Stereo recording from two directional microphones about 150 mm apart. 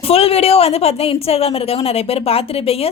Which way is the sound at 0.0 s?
40° left (ahead or behind).